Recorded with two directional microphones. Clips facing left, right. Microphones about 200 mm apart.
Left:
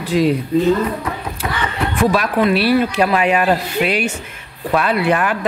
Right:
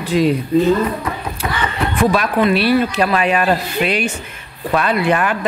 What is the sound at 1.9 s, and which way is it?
Speech, centre (ahead or behind).